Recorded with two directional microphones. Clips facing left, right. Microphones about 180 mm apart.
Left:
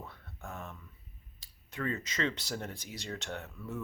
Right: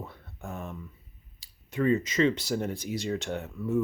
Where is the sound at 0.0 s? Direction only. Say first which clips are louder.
Right 5 dB; 20° right (ahead or behind).